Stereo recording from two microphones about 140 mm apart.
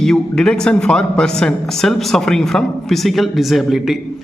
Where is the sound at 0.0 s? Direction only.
5° left (ahead or behind).